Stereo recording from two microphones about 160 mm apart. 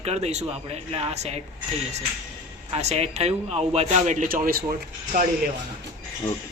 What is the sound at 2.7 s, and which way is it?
Speech, 40° right (ahead or behind).